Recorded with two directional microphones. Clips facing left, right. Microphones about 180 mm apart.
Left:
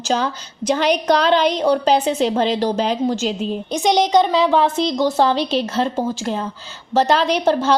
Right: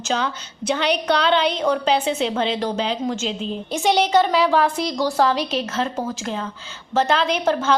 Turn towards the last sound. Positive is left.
turn(degrees=35)  # may be behind; listen again after turning